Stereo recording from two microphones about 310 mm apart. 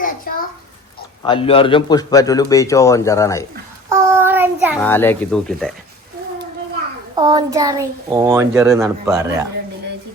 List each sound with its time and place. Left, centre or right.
0.3 s a sound: left
1.2 s a man's voice: centre
3.8 s child singing: centre
4.8 s speech: centre
7.2 s speech: centre